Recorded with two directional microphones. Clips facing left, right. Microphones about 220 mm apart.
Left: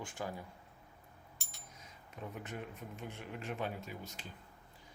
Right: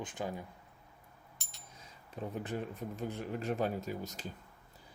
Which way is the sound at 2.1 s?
35° right (ahead or behind).